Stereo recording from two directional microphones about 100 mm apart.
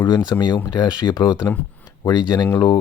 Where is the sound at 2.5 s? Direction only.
45° left (ahead or behind).